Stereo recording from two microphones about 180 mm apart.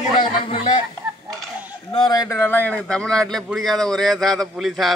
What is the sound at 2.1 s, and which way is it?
A man's voice, 20° left (ahead or behind).